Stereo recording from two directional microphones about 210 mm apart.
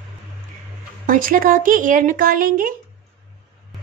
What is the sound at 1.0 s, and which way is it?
Speech, 40° right (ahead or behind).